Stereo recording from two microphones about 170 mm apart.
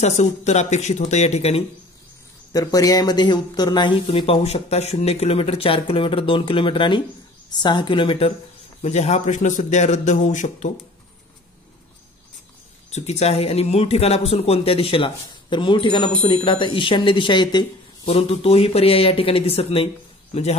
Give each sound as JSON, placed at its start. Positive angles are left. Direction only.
{"t": 0.0, "sound": "speech", "side_deg": 40}
{"t": 2.5, "sound": "speech", "side_deg": 20}
{"t": 8.8, "sound": "speech", "side_deg": 40}
{"t": 12.9, "sound": "speech", "side_deg": 40}